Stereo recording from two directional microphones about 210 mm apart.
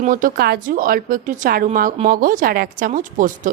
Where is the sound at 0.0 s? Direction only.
40° right (ahead or behind).